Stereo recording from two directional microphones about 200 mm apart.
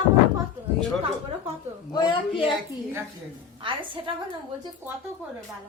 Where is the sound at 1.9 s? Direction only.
20° left (ahead or behind).